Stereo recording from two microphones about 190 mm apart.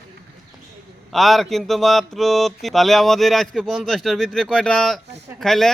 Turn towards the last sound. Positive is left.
turn(degrees=0)  # may be behind; listen again after turning